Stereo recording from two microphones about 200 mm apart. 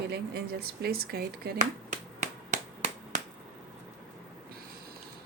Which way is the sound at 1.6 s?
40° right (ahead or behind).